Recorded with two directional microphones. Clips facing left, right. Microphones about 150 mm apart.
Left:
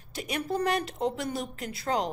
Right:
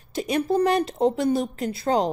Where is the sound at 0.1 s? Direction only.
30° right (ahead or behind).